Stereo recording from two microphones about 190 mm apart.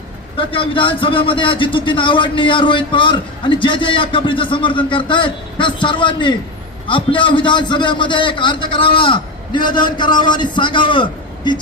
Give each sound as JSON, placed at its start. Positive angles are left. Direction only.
{"t": 0.3, "sound": "a man's voice", "side_deg": 25}